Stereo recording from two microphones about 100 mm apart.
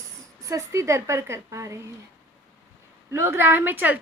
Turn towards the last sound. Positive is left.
turn(degrees=-20)  # may be behind; listen again after turning